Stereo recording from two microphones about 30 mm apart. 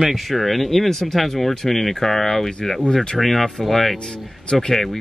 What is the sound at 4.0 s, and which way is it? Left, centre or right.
Speech, centre.